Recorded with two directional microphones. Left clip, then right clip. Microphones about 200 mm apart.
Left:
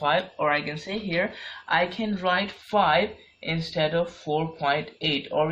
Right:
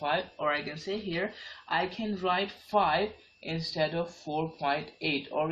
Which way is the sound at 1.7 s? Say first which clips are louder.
Left 6 dB; 35° left (ahead or behind).